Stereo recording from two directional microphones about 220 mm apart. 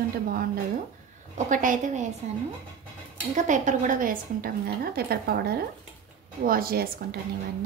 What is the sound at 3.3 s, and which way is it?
A woman's voice, 35° right (ahead or behind).